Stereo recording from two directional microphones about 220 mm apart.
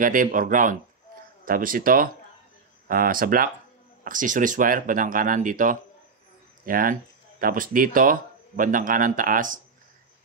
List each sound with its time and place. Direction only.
0.0 s speech: 40° right (ahead or behind)